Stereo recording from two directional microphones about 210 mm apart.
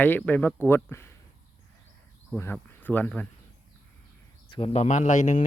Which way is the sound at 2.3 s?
5° left (ahead or behind).